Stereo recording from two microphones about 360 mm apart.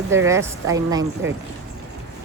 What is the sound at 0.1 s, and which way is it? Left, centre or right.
Speech, centre.